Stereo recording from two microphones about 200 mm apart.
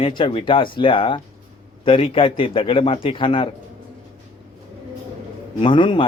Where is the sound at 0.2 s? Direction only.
25° left (ahead or behind).